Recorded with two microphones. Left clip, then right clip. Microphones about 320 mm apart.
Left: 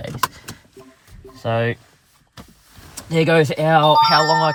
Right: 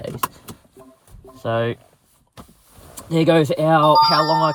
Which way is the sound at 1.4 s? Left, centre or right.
Left.